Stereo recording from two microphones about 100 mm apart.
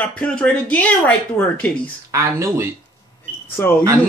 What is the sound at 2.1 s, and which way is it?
Speech, 30° right (ahead or behind).